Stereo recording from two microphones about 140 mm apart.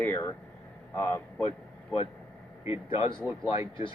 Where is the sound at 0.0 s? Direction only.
10° left (ahead or behind).